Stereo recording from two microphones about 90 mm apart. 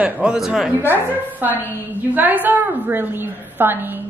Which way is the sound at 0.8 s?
20° right (ahead or behind).